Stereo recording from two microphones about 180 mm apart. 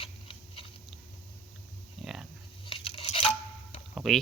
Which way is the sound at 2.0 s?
Centre (ahead or behind).